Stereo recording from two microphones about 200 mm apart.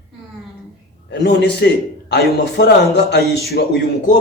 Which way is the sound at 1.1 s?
55° left (ahead or behind).